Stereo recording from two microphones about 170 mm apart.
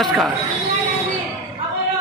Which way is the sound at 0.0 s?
Centre (ahead or behind).